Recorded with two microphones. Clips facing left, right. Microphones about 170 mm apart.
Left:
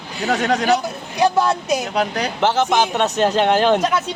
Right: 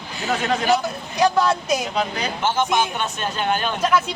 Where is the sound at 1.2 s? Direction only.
20° left (ahead or behind).